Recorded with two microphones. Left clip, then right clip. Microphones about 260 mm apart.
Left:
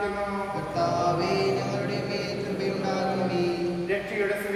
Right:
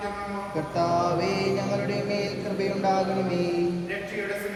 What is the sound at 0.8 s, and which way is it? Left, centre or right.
Mantra, right.